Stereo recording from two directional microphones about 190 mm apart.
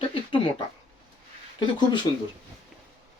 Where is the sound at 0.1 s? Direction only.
30° left (ahead or behind).